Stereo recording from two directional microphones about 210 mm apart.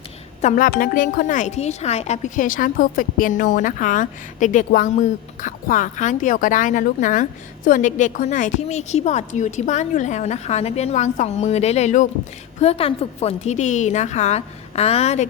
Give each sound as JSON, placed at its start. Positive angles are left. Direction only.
{"t": 0.4, "sound": "speech", "side_deg": 40}